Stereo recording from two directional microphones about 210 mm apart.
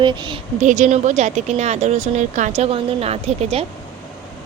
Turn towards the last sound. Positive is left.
turn(degrees=-30)  # may be behind; listen again after turning